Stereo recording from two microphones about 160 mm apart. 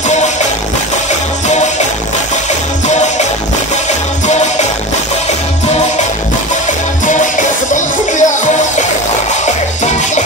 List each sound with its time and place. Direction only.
2.9 s music: 45° left (ahead or behind)
4.3 s music: 45° left (ahead or behind)
7.1 s music: 50° left (ahead or behind)